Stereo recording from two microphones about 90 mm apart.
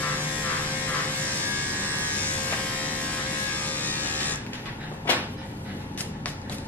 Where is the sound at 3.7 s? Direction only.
20° left (ahead or behind).